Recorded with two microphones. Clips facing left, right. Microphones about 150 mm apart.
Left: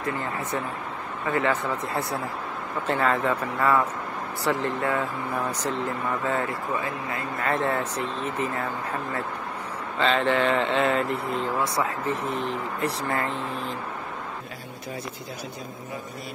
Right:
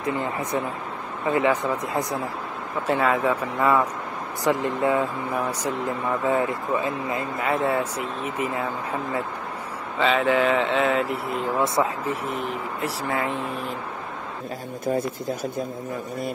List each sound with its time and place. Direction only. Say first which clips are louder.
0.0 s speech: right 3 dB; 15° right (ahead or behind)
7.4 s speech: right 2 dB; 10° right (ahead or behind)
9.9 s speech: right 2 dB; 5° right (ahead or behind)
11.4 s speech: right 6 dB; 20° right (ahead or behind)
12.8 s speech: right 1 dB; 5° right (ahead or behind)
14.9 s speech: right 11 dB; 50° right (ahead or behind)